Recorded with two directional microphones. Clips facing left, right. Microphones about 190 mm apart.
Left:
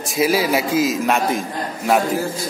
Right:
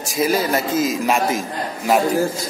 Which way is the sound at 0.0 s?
5° left (ahead or behind).